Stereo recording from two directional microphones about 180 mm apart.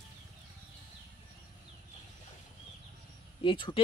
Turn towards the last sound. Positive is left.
turn(degrees=30)  # may be behind; listen again after turning